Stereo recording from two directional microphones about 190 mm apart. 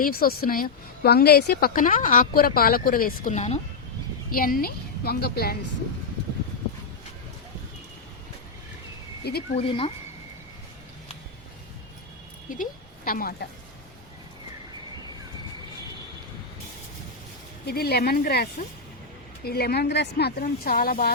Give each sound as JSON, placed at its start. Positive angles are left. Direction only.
{"t": 0.0, "sound": "a woman's voice", "side_deg": 50}
{"t": 4.3, "sound": "a woman's voice", "side_deg": 50}
{"t": 9.2, "sound": "speech", "side_deg": 60}
{"t": 9.6, "sound": "speech", "side_deg": 30}
{"t": 12.5, "sound": "a woman's voice", "side_deg": 45}
{"t": 17.7, "sound": "speech", "side_deg": 55}
{"t": 19.5, "sound": "speech", "side_deg": 55}